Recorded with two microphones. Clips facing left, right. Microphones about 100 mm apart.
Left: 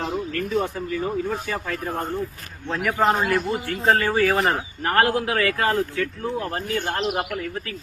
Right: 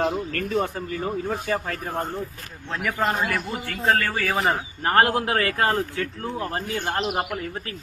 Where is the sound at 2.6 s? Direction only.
Centre (ahead or behind).